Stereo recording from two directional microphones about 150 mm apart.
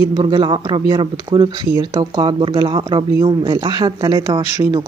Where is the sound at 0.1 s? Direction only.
30° right (ahead or behind).